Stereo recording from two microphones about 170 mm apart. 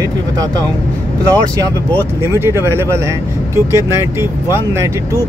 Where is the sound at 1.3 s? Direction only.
20° right (ahead or behind).